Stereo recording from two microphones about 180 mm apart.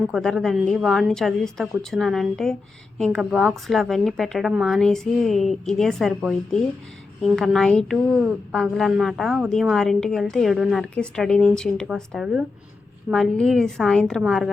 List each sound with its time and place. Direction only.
0.0 s a woman's voice: 5° left (ahead or behind)